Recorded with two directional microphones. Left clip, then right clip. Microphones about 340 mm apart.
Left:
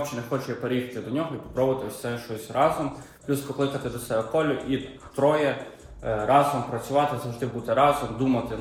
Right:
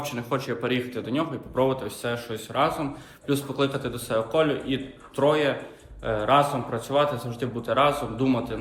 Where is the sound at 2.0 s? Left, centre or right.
Centre.